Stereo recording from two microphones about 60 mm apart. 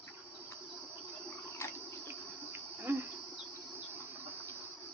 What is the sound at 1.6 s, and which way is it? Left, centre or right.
Water, left.